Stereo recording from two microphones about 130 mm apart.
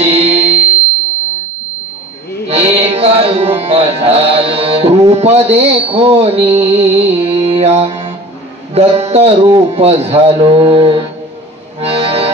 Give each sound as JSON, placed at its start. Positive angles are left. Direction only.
{"t": 0.0, "sound": "music", "side_deg": -50}
{"t": 2.4, "sound": "music", "side_deg": -50}
{"t": 11.8, "sound": "accordion", "side_deg": -50}